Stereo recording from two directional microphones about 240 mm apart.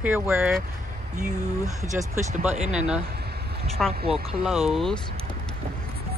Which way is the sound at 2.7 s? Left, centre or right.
Centre.